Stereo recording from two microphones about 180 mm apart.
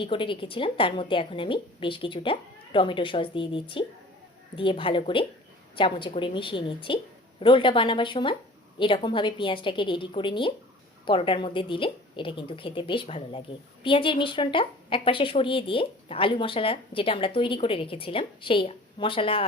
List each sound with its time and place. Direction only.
0.0 s a woman's voice: 30° left (ahead or behind)